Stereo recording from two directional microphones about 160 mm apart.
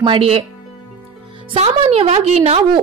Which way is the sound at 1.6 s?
40° right (ahead or behind).